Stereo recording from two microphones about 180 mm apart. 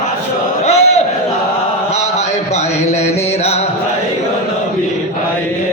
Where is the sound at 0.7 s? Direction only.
35° left (ahead or behind).